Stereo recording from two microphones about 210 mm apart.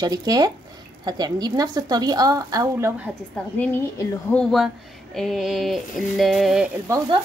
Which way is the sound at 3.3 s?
10° left (ahead or behind).